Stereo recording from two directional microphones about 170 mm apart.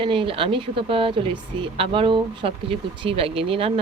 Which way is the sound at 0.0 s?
30° right (ahead or behind).